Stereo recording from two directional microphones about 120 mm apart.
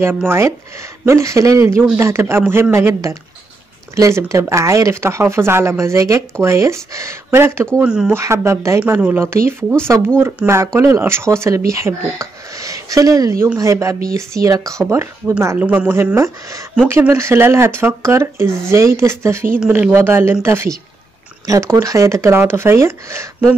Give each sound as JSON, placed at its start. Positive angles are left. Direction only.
{"t": 0.1, "sound": "speech", "side_deg": -20}
{"t": 7.8, "sound": "speech", "side_deg": -5}
{"t": 8.1, "sound": "speech", "side_deg": -25}
{"t": 16.2, "sound": "speech", "side_deg": -25}